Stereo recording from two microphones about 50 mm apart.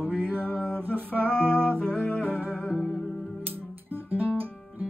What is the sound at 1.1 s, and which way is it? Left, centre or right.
Music, left.